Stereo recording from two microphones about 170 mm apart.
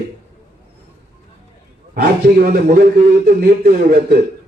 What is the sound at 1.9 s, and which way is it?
A man's voice, 60° right (ahead or behind).